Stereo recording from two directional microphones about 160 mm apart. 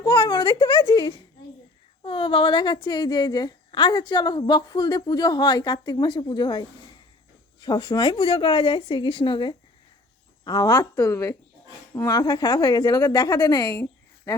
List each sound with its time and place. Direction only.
0.0 s a woman's voice: 30° left (ahead or behind)